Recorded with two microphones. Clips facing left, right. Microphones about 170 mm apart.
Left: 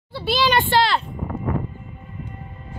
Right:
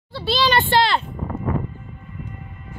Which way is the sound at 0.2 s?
10° left (ahead or behind).